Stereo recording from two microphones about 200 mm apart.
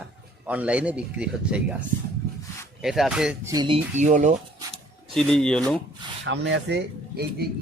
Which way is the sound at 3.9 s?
35° right (ahead or behind).